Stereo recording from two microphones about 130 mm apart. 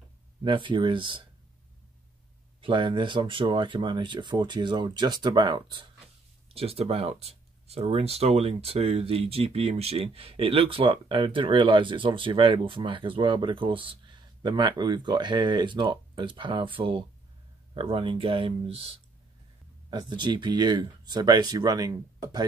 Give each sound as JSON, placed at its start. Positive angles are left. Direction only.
{"t": 0.4, "sound": "speech", "side_deg": -40}
{"t": 2.6, "sound": "speech", "side_deg": -40}
{"t": 6.5, "sound": "speech", "side_deg": -50}
{"t": 19.9, "sound": "speech", "side_deg": -35}